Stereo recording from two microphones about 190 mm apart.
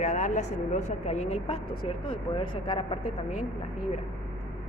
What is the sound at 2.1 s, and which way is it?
Speech, 30° left (ahead or behind).